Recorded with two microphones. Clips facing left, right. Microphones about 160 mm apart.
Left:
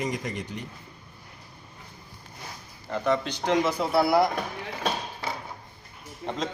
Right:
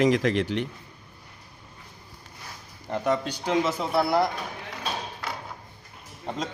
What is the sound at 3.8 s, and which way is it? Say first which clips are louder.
Speech: left 2 dB; 10° left (ahead or behind).